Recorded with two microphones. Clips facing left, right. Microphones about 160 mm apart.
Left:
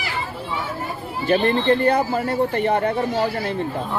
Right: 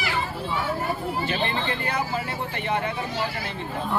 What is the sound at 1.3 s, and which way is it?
Speech, 45° left (ahead or behind).